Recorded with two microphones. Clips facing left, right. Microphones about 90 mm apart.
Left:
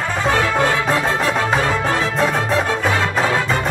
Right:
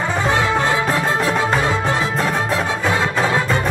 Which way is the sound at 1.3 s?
Centre (ahead or behind).